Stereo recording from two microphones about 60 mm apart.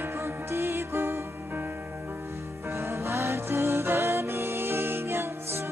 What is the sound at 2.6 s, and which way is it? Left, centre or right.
Music, right.